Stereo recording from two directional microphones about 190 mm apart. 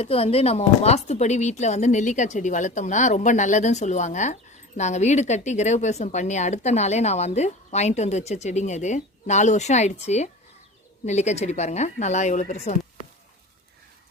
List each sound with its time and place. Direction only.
0.0 s speech: 30° left (ahead or behind)